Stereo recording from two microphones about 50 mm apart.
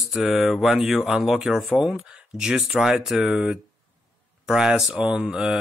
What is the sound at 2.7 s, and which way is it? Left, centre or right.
Speech, centre.